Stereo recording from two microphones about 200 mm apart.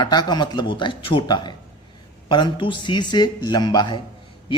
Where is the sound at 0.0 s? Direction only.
20° left (ahead or behind).